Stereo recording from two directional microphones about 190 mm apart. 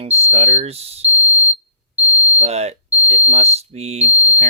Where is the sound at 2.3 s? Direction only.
35° right (ahead or behind).